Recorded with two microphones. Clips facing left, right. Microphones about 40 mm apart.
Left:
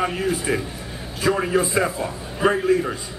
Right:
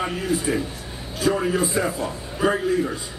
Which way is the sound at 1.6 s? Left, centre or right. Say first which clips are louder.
Left 2 dB; left.